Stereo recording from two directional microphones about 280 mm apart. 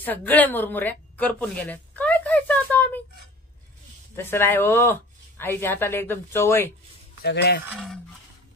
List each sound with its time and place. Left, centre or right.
0.0 s a sound: centre
4.2 s speech: centre
7.2 s speech: left
7.6 s speech: centre